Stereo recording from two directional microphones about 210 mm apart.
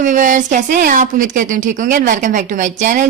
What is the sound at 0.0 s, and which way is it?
Speech, 35° right (ahead or behind).